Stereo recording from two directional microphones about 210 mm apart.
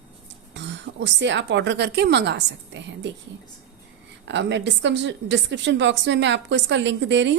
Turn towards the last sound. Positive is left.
turn(degrees=-60)  # may be behind; listen again after turning